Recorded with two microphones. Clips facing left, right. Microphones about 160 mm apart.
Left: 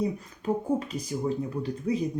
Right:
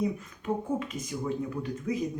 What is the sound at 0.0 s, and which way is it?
Speech, 35° left (ahead or behind).